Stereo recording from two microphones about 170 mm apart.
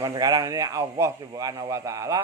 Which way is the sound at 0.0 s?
20° right (ahead or behind).